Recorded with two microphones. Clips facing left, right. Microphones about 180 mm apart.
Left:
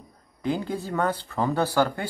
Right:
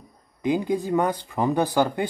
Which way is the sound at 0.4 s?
15° right (ahead or behind).